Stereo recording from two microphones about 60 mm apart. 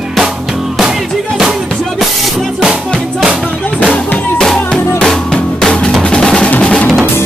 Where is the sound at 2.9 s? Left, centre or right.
Centre.